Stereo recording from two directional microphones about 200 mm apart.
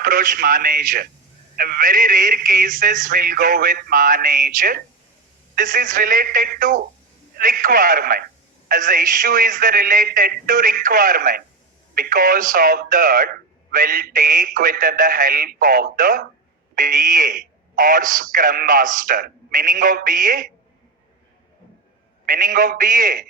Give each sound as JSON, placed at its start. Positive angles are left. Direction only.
{"t": 0.0, "sound": "speech", "side_deg": -45}
{"t": 22.3, "sound": "speech", "side_deg": -45}